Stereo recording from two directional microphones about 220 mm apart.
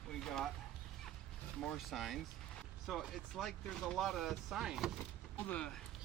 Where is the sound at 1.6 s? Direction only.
Centre (ahead or behind).